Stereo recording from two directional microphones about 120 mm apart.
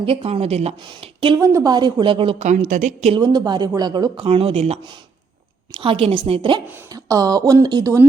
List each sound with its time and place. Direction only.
0.0 s speech: 55° right (ahead or behind)
0.8 s a woman's voice: 45° right (ahead or behind)
1.4 s speech: 30° right (ahead or behind)
2.4 s a woman's voice: 85° right
3.2 s speech: 35° right (ahead or behind)
4.3 s speech: 55° right (ahead or behind)
5.7 s a woman's voice: 50° right (ahead or behind)
6.8 s speech: 30° right (ahead or behind)